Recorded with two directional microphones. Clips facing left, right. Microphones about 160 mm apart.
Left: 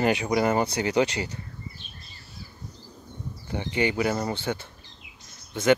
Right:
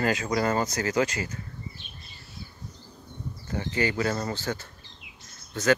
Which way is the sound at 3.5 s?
15° left (ahead or behind).